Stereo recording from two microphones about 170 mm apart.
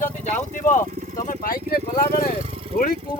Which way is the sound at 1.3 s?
55° left (ahead or behind).